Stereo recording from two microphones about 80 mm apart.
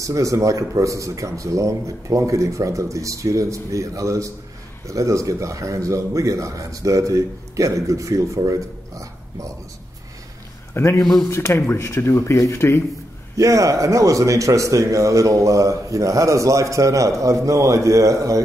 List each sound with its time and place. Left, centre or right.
0.0 s speech: right
10.7 s a man's voice: left
13.4 s speech: right